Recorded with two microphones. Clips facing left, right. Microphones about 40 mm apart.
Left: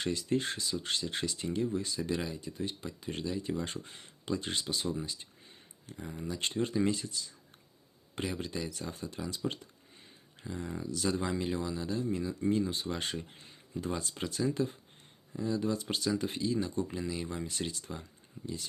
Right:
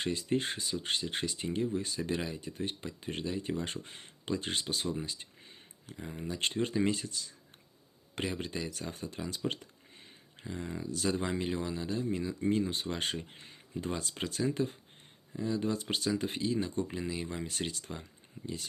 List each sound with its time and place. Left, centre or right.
0.0 s speech: right
2.3 s speech: right
10.5 s speech: right